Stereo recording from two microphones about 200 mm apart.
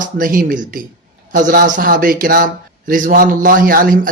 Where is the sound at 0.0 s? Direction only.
45° right (ahead or behind).